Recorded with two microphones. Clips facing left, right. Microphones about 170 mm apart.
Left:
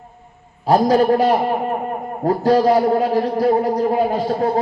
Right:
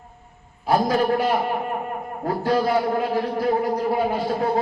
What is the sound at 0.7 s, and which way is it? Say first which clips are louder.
A man's voice: left 6 dB; 40° left (ahead or behind).